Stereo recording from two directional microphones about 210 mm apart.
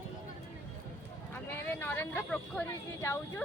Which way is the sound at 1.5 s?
10° left (ahead or behind).